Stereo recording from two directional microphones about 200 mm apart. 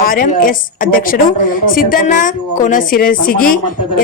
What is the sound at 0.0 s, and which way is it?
A woman's voice, 45° left (ahead or behind).